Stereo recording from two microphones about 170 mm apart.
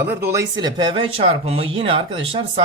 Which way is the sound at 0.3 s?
20° right (ahead or behind).